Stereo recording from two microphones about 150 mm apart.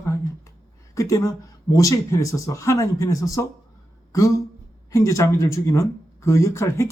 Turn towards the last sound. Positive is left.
turn(degrees=20)  # may be behind; listen again after turning